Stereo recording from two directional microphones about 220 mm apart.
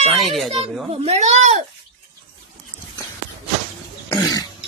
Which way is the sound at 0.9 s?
30° right (ahead or behind).